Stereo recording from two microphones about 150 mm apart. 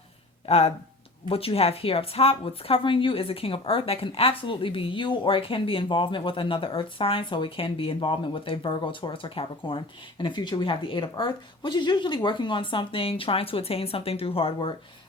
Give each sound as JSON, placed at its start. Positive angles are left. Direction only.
{"t": 0.4, "sound": "speech", "side_deg": 45}